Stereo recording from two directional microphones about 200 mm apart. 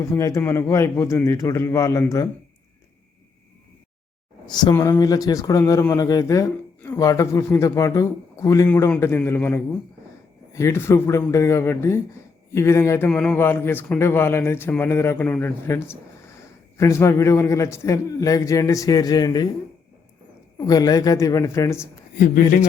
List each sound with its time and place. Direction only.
0.0 s speech: 15° left (ahead or behind)
4.4 s speech: 20° left (ahead or behind)
20.6 s speech: 20° left (ahead or behind)